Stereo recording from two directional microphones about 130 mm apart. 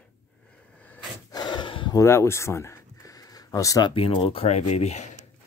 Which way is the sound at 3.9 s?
45° left (ahead or behind).